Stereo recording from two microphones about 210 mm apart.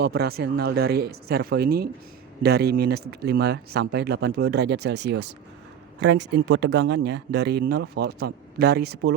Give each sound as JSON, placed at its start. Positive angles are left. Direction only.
{"t": 0.0, "sound": "speech", "side_deg": -50}